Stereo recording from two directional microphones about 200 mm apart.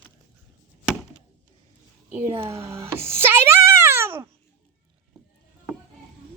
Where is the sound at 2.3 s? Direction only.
15° right (ahead or behind).